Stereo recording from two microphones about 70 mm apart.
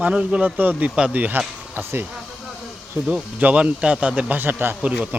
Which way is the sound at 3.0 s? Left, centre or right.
Centre.